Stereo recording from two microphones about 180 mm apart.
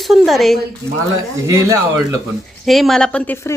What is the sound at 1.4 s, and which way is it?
Speech, 15° right (ahead or behind).